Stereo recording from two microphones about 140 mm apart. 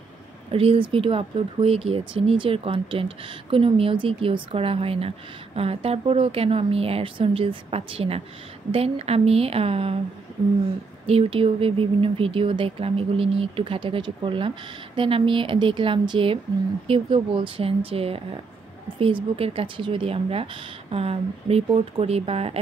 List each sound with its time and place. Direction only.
0.5 s speech: 45° right (ahead or behind)
11.1 s speech: 45° right (ahead or behind)